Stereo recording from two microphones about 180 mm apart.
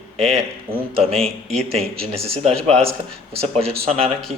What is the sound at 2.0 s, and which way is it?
Speech, 35° right (ahead or behind).